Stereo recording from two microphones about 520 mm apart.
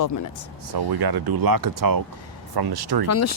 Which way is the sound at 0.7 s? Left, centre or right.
Right.